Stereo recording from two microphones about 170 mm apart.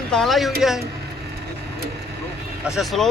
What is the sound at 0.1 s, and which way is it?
Speech, centre (ahead or behind).